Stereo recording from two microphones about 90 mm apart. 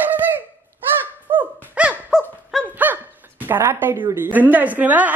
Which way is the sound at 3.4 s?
25° right (ahead or behind).